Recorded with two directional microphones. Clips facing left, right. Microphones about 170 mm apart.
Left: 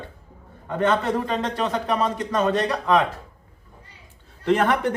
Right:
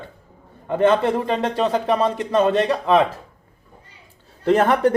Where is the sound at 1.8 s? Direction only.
25° right (ahead or behind).